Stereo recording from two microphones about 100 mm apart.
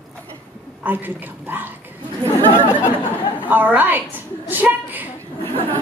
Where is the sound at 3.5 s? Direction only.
20° right (ahead or behind).